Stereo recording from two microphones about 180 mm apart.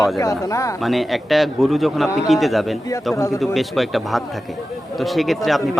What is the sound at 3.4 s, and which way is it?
Speech, centre (ahead or behind).